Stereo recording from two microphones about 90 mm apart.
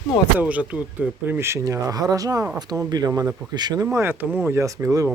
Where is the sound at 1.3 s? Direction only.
30° right (ahead or behind).